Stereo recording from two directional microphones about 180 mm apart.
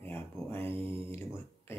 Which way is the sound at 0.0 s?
10° left (ahead or behind).